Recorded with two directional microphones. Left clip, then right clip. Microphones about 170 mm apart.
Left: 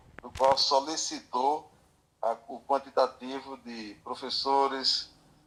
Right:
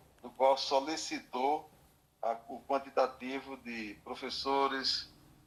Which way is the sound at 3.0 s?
10° left (ahead or behind).